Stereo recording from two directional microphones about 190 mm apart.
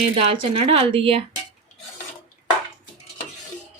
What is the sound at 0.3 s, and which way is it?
Speech, 30° right (ahead or behind).